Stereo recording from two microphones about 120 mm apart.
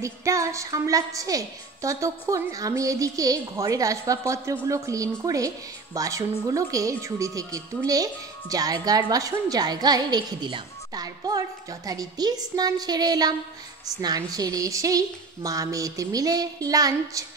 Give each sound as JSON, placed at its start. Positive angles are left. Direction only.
{"t": 0.0, "sound": "a woman's voice", "side_deg": -25}